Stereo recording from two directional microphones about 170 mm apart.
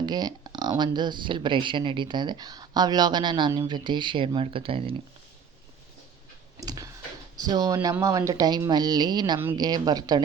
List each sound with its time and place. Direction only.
0.0 s speech: 25° right (ahead or behind)
6.6 s clicking: 20° right (ahead or behind)
7.3 s speech: 20° right (ahead or behind)